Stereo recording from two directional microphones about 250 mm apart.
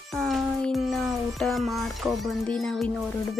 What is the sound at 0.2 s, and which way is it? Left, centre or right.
Music, centre.